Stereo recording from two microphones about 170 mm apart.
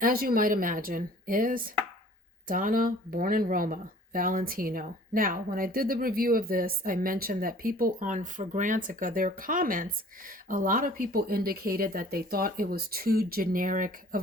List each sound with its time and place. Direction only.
0.0 s speech: 60° right (ahead or behind)